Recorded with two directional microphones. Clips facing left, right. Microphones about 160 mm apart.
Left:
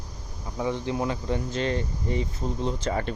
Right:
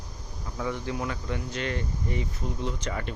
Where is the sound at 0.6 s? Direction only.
25° left (ahead or behind).